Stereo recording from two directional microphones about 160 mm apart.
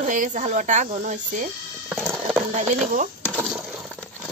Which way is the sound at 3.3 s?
10° right (ahead or behind).